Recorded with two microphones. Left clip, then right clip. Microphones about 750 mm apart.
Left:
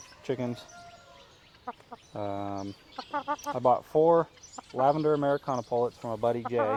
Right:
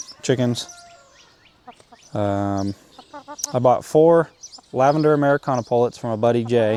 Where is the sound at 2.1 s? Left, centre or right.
Right.